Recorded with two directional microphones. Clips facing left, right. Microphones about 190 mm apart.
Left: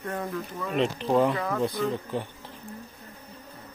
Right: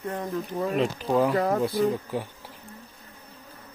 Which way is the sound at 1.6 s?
5° right (ahead or behind).